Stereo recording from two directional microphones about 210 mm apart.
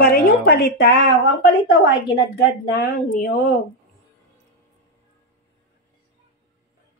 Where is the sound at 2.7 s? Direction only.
45° left (ahead or behind).